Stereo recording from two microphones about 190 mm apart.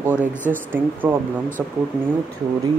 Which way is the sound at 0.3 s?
10° left (ahead or behind).